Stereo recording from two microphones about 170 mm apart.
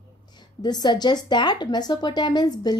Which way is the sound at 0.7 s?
25° left (ahead or behind).